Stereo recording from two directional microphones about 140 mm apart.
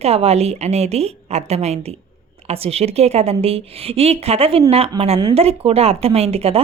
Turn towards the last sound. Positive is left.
turn(degrees=-45)  # may be behind; listen again after turning